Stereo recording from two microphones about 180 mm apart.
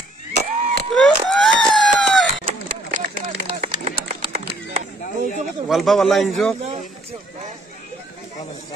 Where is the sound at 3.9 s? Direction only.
35° right (ahead or behind).